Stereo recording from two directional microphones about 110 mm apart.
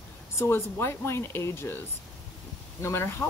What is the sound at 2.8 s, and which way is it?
Speech, 25° left (ahead or behind).